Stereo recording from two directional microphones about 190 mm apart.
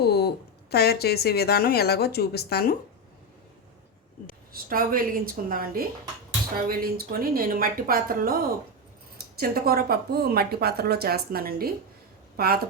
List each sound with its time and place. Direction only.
0.0 s a sound: 60° left (ahead or behind)
0.7 s a woman's voice: 55° left (ahead or behind)
4.5 s a woman's voice: 50° right (ahead or behind)